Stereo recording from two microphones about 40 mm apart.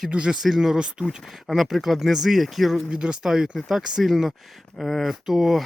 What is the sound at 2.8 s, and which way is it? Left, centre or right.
Speech, right.